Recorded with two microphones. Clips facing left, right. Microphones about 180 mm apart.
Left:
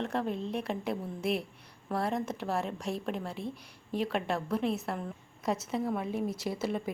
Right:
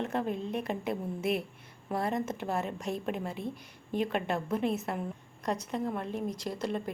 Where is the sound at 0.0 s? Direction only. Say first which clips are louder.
Even; centre (ahead or behind).